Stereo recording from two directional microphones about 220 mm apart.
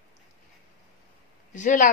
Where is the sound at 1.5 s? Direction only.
35° left (ahead or behind).